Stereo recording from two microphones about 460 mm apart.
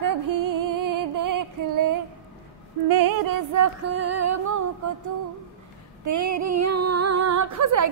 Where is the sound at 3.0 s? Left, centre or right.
Right.